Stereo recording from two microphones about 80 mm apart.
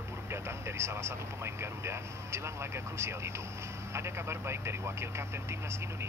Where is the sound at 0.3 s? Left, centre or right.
Right.